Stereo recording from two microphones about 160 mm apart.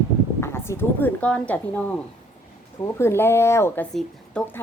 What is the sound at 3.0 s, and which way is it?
A woman's voice, 15° left (ahead or behind).